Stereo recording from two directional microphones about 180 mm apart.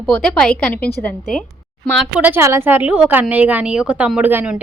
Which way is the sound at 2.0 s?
5° right (ahead or behind).